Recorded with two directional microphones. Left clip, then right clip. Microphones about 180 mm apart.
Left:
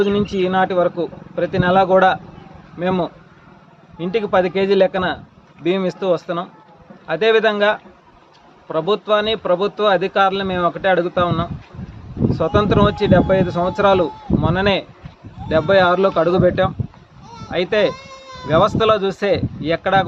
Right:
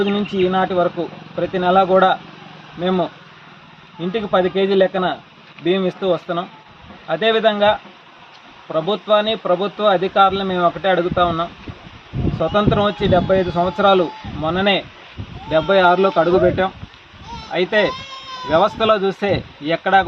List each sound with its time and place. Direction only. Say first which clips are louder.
0.4 s speech: even; 25° left (ahead or behind)
4.1 s speech: left 1 dB; 25° left (ahead or behind)